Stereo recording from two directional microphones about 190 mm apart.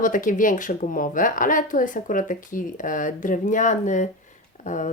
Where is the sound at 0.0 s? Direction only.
45° left (ahead or behind).